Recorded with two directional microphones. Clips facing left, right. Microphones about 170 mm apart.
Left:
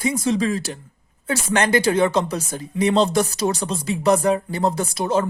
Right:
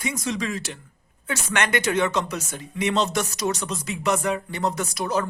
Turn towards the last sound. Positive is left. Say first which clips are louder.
# left 4 dB
turn(degrees=25)  # may be behind; listen again after turning